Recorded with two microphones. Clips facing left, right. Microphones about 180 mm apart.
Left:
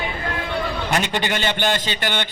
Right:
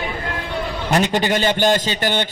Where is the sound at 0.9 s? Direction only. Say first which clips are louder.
Right 6 dB; 40° right (ahead or behind).